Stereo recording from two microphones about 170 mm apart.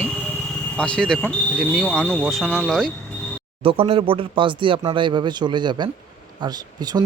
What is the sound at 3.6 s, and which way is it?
Speech, 30° right (ahead or behind).